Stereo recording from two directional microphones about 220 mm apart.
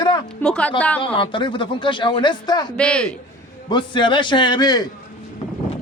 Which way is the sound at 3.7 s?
20° left (ahead or behind).